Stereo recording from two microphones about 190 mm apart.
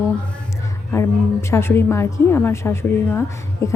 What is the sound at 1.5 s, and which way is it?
A woman's voice, 10° left (ahead or behind).